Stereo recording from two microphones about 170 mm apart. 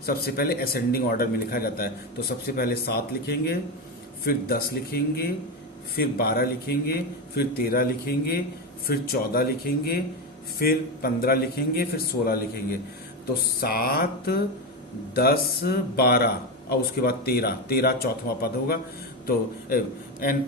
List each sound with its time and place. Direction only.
0.0 s a man's voice: 60° left (ahead or behind)